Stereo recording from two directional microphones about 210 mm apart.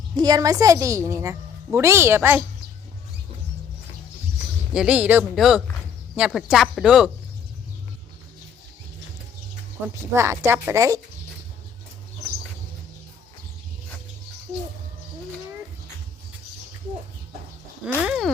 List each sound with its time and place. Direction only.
0.2 s a woman's voice: 20° right (ahead or behind)
4.7 s speech: 5° right (ahead or behind)
9.9 s a woman's voice: 15° right (ahead or behind)
17.8 s speech: 5° right (ahead or behind)